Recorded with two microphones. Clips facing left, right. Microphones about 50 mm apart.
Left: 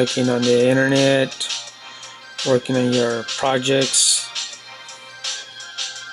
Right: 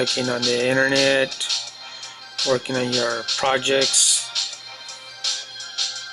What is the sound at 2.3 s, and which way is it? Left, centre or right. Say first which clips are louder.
Speech: left 4 dB; left.